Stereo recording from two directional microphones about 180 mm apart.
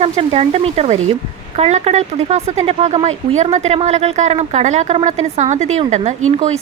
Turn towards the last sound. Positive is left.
turn(degrees=-40)  # may be behind; listen again after turning